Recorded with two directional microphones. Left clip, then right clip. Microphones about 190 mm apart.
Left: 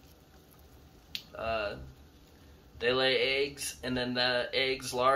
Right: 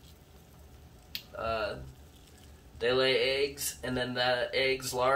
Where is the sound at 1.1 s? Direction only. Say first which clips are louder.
Even; centre (ahead or behind).